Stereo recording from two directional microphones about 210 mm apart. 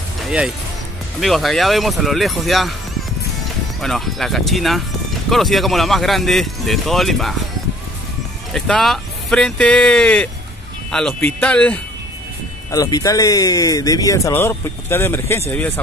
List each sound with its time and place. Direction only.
1.2 s speech: centre (ahead or behind)
3.8 s speech: centre (ahead or behind)
8.5 s speech: centre (ahead or behind)
12.7 s speech: 15° left (ahead or behind)